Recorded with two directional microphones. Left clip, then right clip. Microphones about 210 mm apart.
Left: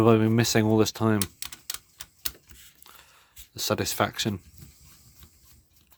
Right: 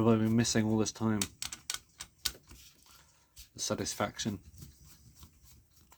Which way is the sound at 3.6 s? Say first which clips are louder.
Left 8 dB; 40° left (ahead or behind).